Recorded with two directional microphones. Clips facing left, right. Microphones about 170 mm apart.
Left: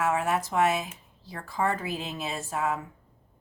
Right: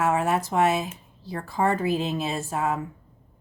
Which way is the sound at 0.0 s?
30° right (ahead or behind).